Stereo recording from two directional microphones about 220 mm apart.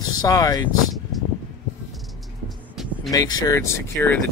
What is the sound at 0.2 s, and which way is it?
Speech, 15° left (ahead or behind).